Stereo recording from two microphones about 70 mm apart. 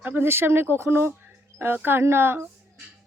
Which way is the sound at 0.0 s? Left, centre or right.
Right.